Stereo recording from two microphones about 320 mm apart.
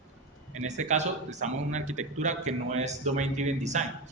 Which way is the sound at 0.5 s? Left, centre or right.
Right.